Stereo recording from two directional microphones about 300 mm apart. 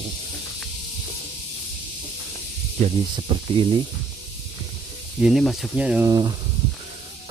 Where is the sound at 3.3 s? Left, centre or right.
Centre.